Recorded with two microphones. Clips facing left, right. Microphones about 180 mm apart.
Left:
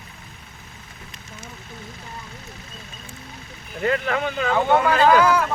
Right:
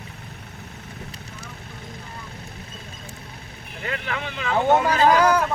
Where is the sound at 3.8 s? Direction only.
40° left (ahead or behind).